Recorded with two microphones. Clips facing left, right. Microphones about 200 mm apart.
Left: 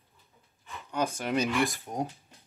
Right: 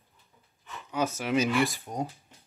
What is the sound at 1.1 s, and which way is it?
Speech, 5° right (ahead or behind).